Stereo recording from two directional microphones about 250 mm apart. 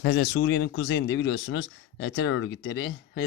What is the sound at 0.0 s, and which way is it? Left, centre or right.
Speech, left.